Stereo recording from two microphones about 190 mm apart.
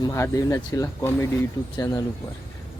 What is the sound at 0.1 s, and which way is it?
Speech, 15° left (ahead or behind).